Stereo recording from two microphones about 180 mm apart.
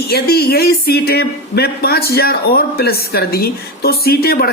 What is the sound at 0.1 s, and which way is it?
Speech, 60° left (ahead or behind).